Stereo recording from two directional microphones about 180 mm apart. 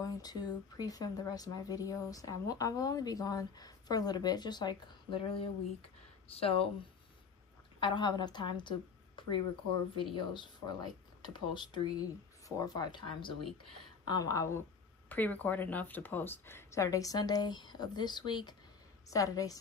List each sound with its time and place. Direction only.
0.0 s a woman's voice: 20° left (ahead or behind)
7.8 s a woman's voice: 25° left (ahead or behind)